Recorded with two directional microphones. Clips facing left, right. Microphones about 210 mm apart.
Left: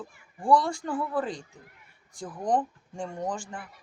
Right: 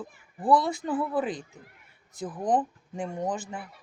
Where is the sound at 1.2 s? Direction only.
20° right (ahead or behind).